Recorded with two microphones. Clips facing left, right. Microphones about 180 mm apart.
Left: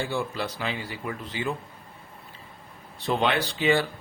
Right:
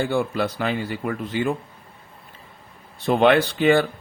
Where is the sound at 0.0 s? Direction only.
55° right (ahead or behind).